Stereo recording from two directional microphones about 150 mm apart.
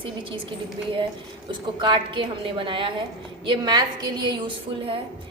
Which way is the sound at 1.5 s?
30° right (ahead or behind).